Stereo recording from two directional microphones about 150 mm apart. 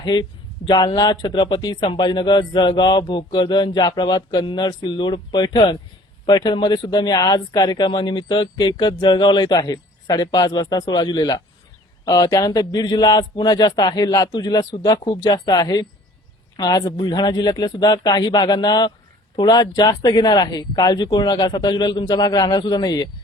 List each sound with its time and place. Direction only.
0.0 s speech: 30° left (ahead or behind)